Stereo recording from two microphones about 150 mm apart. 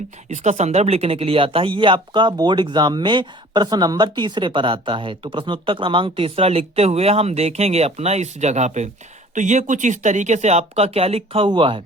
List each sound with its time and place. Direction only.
0.3 s speech: 50° right (ahead or behind); by 11.8 s 35° right (ahead or behind)